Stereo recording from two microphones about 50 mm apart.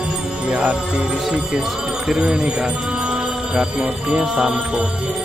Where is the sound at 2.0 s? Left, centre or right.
Centre.